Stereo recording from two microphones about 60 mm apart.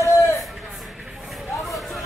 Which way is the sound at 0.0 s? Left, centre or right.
Left.